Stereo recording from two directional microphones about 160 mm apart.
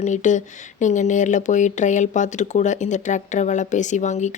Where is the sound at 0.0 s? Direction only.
50° left (ahead or behind).